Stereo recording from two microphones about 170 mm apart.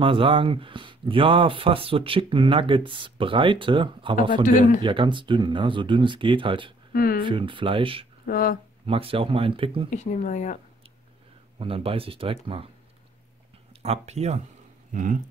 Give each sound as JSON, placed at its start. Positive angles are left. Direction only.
{"t": 0.0, "sound": "speech", "side_deg": -30}
{"t": 6.9, "sound": "speech", "side_deg": 60}
{"t": 7.2, "sound": "speech", "side_deg": -30}
{"t": 8.3, "sound": "speech", "side_deg": 55}
{"t": 8.8, "sound": "speech", "side_deg": -35}
{"t": 9.8, "sound": "speech", "side_deg": 45}
{"t": 11.5, "sound": "speech", "side_deg": -35}
{"t": 13.8, "sound": "speech", "side_deg": -40}